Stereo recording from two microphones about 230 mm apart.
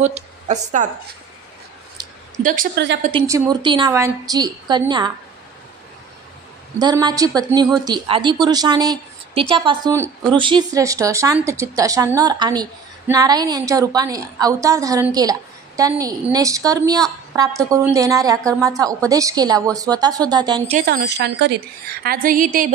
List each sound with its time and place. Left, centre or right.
0.0 s a woman's voice: right
2.4 s a woman's voice: right
3.0 s a woman's voice: right
6.8 s speech: centre
20.7 s a woman's voice: right